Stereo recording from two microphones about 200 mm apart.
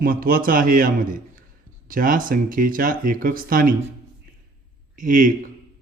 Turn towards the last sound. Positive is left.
turn(degrees=-40)  # may be behind; listen again after turning